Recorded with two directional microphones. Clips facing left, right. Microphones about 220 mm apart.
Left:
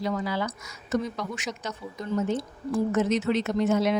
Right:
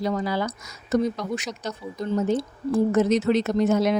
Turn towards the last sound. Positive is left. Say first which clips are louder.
# right 3 dB
turn(degrees=-40)  # may be behind; listen again after turning